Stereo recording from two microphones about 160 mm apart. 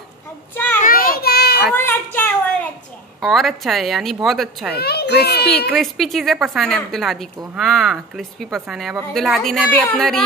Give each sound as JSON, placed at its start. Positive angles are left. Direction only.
{"t": 0.8, "sound": "children playing", "side_deg": 65}
{"t": 1.8, "sound": "a sound", "side_deg": 15}
{"t": 3.2, "sound": "a woman's voice", "side_deg": 0}
{"t": 4.7, "sound": "a child's voice", "side_deg": 90}
{"t": 5.7, "sound": "a woman's voice", "side_deg": 0}